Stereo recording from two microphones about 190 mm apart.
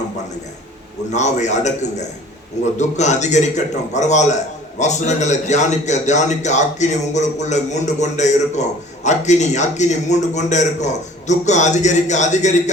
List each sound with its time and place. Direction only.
1.1 s a man's voice: 40° left (ahead or behind)